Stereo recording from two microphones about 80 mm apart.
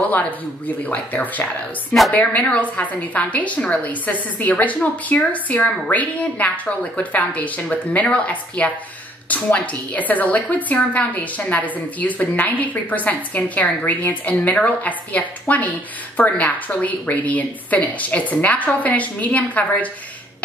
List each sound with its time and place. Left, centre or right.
0.8 s a woman's voice: centre